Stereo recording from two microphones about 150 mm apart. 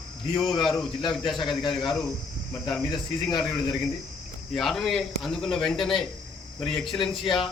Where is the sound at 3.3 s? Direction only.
Centre (ahead or behind).